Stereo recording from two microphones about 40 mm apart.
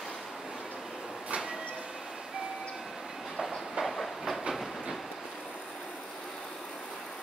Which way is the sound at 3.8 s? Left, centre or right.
Centre.